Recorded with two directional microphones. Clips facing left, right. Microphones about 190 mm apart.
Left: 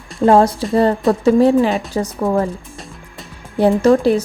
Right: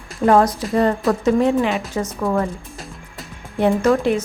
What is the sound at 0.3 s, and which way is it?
A woman's voice, 30° left (ahead or behind).